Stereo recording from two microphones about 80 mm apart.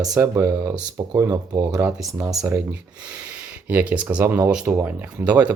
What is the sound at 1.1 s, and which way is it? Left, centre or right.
Speech, right.